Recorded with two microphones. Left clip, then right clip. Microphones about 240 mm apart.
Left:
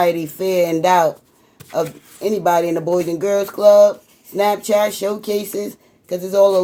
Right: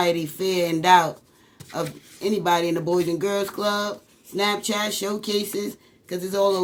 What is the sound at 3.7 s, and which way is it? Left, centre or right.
Speech, right.